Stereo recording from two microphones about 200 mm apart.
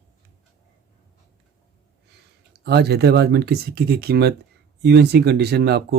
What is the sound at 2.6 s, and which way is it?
Speech, 55° right (ahead or behind).